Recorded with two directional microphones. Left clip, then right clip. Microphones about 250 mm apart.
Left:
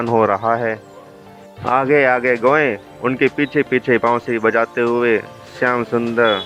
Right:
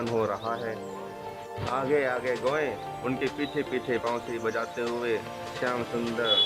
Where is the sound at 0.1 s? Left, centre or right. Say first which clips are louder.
Left 15 dB; centre.